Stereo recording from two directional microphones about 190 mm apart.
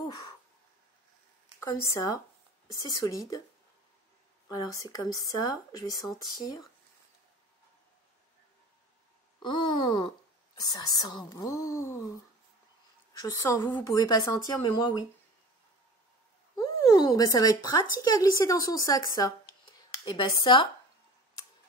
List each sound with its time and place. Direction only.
0.0 s a sound: 20° left (ahead or behind)
1.6 s speech: 15° left (ahead or behind)
4.5 s speech: 20° left (ahead or behind)
9.4 s speech: 25° left (ahead or behind)
13.2 s speech: 15° left (ahead or behind)
16.5 s speech: 20° left (ahead or behind)